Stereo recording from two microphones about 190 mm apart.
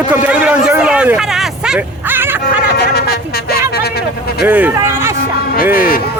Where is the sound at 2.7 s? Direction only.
60° left (ahead or behind).